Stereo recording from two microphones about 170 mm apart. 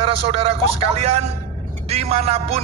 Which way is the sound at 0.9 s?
40° right (ahead or behind).